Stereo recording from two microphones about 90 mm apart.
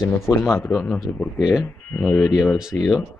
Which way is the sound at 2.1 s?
35° left (ahead or behind).